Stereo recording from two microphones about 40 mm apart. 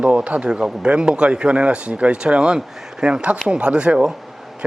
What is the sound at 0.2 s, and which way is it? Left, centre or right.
Speech, right.